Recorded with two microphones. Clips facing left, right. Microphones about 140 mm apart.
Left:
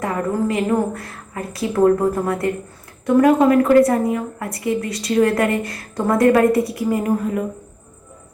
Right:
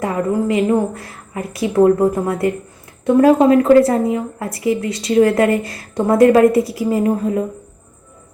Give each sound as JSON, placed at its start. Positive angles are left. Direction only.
{"t": 0.0, "sound": "speech", "side_deg": -20}